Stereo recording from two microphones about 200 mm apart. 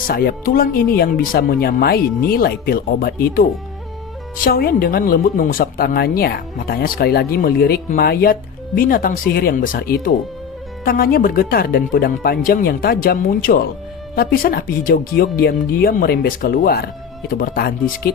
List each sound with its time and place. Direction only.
0.1 s speech: 50° left (ahead or behind)
4.4 s speech: 45° left (ahead or behind)